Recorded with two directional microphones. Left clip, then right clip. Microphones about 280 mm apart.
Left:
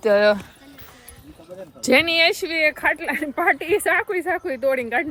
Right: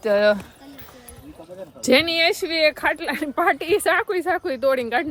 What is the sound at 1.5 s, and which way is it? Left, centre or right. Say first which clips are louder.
Speech: even; centre.